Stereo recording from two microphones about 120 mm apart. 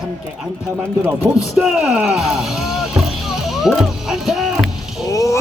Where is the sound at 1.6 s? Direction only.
5° right (ahead or behind).